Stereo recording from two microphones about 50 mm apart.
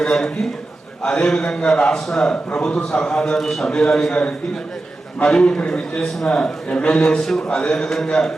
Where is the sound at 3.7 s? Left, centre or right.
Centre.